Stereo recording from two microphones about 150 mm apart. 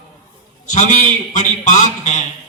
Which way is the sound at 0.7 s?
55° left (ahead or behind).